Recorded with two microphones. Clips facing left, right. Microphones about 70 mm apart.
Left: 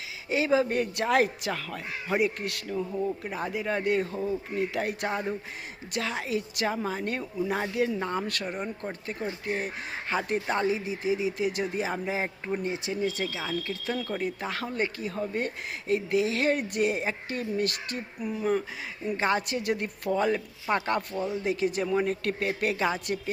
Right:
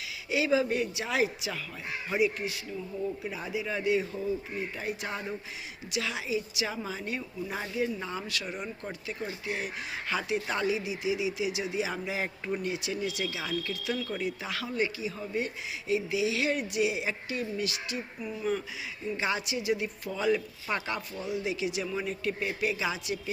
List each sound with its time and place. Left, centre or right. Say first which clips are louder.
0.3 s speech: left 2 dB; left
3.2 s speech: left 3 dB; left
4.5 s speech: left 6 dB; left
7.9 s speech: left 5 dB; left
19.1 s speech: left 5 dB; left